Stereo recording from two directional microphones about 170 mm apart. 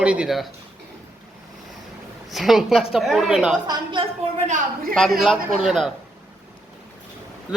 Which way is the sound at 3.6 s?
25° right (ahead or behind).